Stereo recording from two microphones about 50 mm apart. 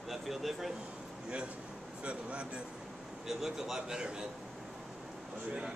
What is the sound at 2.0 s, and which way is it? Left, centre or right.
Speech, right.